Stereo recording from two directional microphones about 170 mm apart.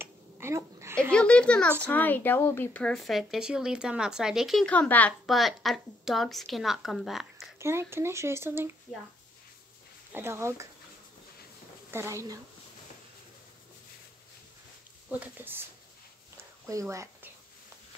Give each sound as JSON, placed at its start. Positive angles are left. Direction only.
{"t": 0.0, "sound": "a sound", "side_deg": -15}
{"t": 1.1, "sound": "speech", "side_deg": 5}
{"t": 7.5, "sound": "speech", "side_deg": -15}
{"t": 10.1, "sound": "speech", "side_deg": -15}
{"t": 11.9, "sound": "speech", "side_deg": -15}
{"t": 15.0, "sound": "speech", "side_deg": -10}
{"t": 16.6, "sound": "speech", "side_deg": -20}